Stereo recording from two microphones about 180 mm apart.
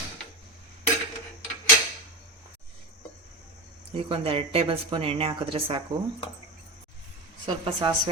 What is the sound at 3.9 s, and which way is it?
Speech, 30° right (ahead or behind).